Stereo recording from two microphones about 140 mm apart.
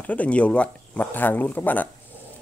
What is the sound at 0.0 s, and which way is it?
Speech, 10° left (ahead or behind).